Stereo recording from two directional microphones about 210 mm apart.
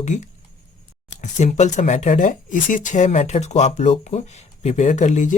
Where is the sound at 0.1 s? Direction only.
35° left (ahead or behind).